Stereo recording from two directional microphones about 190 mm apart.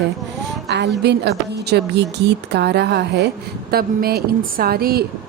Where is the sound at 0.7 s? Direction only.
60° right (ahead or behind).